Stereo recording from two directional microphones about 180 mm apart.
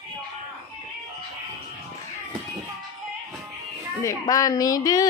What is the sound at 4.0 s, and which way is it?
A woman's voice, 20° left (ahead or behind).